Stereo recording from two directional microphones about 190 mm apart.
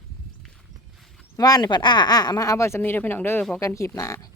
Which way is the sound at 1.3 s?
20° left (ahead or behind).